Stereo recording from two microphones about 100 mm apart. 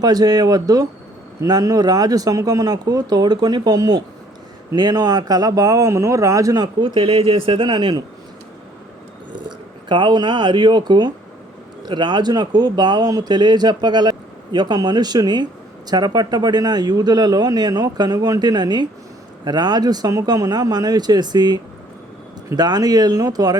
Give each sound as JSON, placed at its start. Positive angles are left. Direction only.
{"t": 0.0, "sound": "speech", "side_deg": -40}
{"t": 6.8, "sound": "speech", "side_deg": -55}
{"t": 9.9, "sound": "speech", "side_deg": -50}